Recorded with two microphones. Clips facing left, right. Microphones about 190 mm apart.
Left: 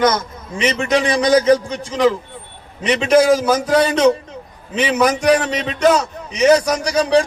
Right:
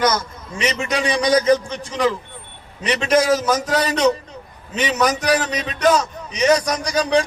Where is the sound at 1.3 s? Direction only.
10° left (ahead or behind).